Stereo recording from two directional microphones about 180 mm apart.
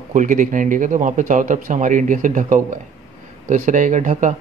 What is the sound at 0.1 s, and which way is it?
Speech, 45° right (ahead or behind).